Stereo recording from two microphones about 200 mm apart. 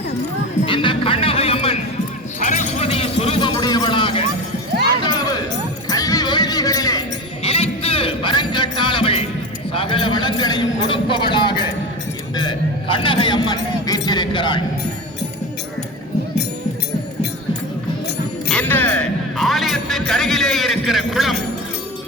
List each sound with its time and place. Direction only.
0.6 s music: 25° left (ahead or behind)
2.4 s a sound: 35° left (ahead or behind)
5.9 s music: 15° left (ahead or behind)
7.4 s music: 30° left (ahead or behind)
9.7 s a man's voice: 25° left (ahead or behind)
18.4 s music: 5° left (ahead or behind)